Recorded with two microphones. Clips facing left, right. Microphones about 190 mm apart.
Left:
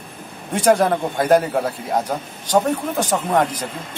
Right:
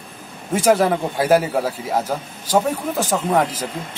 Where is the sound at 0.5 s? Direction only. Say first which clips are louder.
Even; 5° right (ahead or behind).